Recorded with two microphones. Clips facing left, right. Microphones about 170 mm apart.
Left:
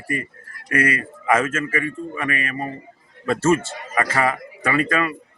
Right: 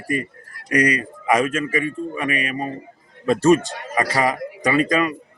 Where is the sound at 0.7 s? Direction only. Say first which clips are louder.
Right 2 dB; 15° right (ahead or behind).